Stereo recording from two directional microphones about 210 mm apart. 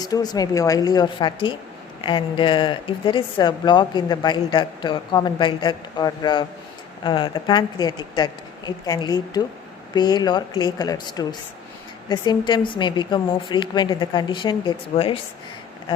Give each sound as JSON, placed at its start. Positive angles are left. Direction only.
{"t": 0.0, "sound": "a woman's voice", "side_deg": 20}